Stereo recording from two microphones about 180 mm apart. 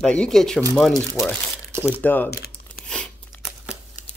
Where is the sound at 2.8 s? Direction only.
5° left (ahead or behind).